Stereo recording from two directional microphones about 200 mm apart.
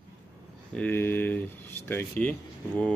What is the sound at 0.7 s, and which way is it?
Speech, 10° left (ahead or behind).